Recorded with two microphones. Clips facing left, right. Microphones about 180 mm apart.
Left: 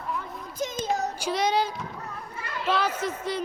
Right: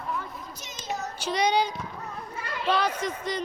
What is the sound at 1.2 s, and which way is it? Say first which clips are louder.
Child singing: right 4 dB; 5° left (ahead or behind).